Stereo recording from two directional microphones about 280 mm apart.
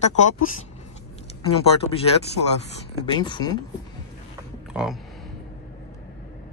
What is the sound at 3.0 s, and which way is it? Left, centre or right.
Speech, centre.